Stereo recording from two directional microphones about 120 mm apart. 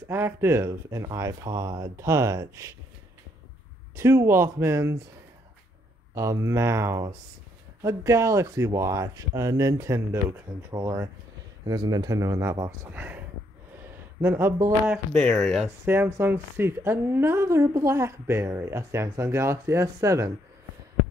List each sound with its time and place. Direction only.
0.1 s a woman's voice: 20° right (ahead or behind)
3.9 s a woman's voice: 25° right (ahead or behind)
6.1 s a woman's voice: 25° right (ahead or behind)
12.9 s speech: 15° right (ahead or behind)
13.8 s a sound: 20° right (ahead or behind)
15.4 s speech: centre (ahead or behind)
15.8 s a woman's voice: 20° right (ahead or behind)